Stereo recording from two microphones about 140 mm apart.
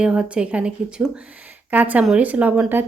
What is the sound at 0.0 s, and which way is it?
A woman's voice, 5° right (ahead or behind).